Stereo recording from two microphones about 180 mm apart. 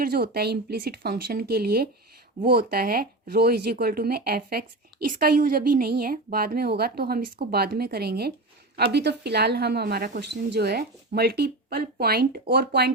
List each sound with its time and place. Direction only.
0.0 s speech: 60° right (ahead or behind)